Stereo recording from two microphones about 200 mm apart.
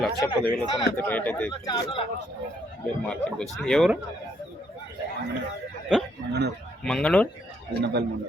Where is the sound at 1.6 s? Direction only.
20° left (ahead or behind).